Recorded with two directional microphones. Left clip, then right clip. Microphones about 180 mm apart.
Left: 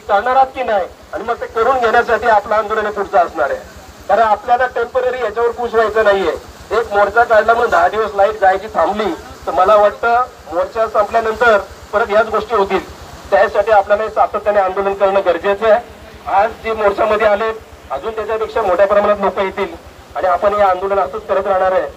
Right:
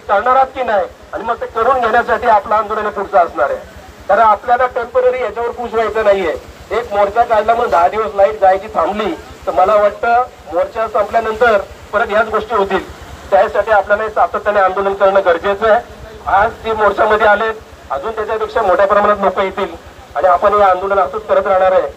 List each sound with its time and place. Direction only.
0.1 s a man's voice: 20° right (ahead or behind)